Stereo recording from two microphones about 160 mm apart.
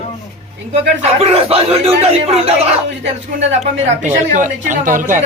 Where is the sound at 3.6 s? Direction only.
50° right (ahead or behind).